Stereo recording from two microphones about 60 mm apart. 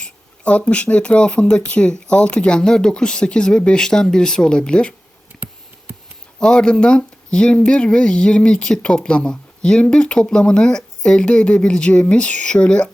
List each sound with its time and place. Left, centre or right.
0.0 s a sound: centre
0.7 s speech: left
6.4 s speech: centre